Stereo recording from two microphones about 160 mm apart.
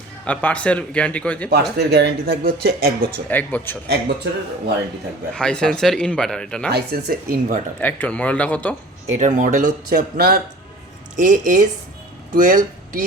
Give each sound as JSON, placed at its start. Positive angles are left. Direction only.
{"t": 0.3, "sound": "speech", "side_deg": 10}
{"t": 1.8, "sound": "speech", "side_deg": -90}
{"t": 3.2, "sound": "speech", "side_deg": 10}
{"t": 3.8, "sound": "speech", "side_deg": -85}
{"t": 5.3, "sound": "speech", "side_deg": 5}
{"t": 6.7, "sound": "speech", "side_deg": -80}
{"t": 7.8, "sound": "speech", "side_deg": 10}
{"t": 9.1, "sound": "speech", "side_deg": -50}
{"t": 9.9, "sound": "speech", "side_deg": -75}
{"t": 11.2, "sound": "speech", "side_deg": -55}